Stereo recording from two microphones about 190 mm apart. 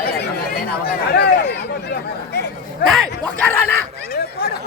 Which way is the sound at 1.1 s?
60° left (ahead or behind).